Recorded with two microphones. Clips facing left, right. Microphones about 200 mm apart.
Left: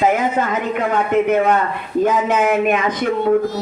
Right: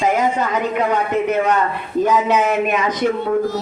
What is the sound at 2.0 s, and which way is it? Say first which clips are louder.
Speech: even; 50° left (ahead or behind).